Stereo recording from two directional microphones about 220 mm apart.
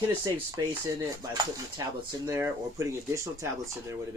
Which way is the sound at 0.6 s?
15° right (ahead or behind).